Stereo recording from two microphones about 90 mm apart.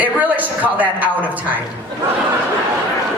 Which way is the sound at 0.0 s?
15° right (ahead or behind).